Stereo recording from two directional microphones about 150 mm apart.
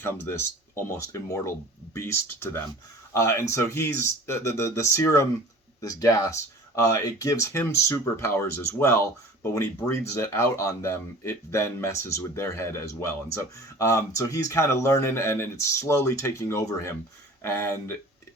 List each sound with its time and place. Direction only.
0.0 s speech: 15° left (ahead or behind)